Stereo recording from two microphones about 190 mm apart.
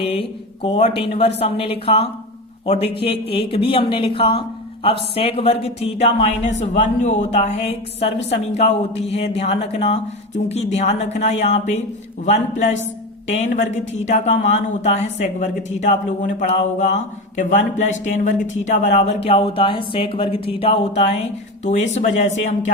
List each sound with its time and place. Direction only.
0.0 s a woman's voice: 30° left (ahead or behind)